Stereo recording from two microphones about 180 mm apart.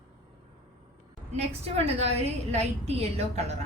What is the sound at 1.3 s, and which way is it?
A woman's voice, 35° right (ahead or behind).